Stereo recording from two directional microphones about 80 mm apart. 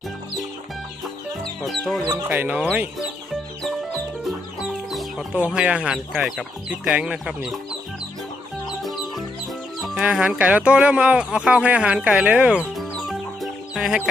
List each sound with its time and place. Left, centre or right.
1.6 s chicken: centre
2.2 s speech: right
4.2 s chicken: centre
5.5 s speech: centre
8.8 s music: centre
10.0 s speech: centre
12.7 s music: centre